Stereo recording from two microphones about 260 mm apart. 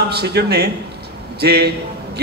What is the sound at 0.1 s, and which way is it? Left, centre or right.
A man's voice, right.